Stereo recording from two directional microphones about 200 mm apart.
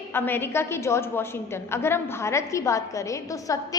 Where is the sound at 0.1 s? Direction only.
10° left (ahead or behind).